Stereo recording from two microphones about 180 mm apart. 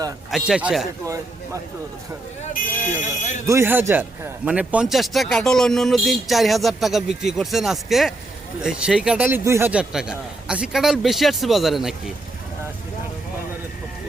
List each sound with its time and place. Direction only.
0.3 s a man's voice: centre (ahead or behind)
2.4 s speech: 45° left (ahead or behind)
3.4 s a man's voice: 15° right (ahead or behind)